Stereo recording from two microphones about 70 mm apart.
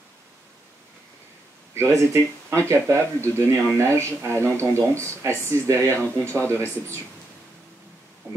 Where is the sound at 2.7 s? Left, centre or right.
Right.